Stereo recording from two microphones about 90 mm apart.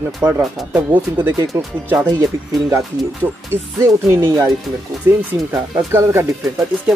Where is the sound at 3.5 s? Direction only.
30° right (ahead or behind).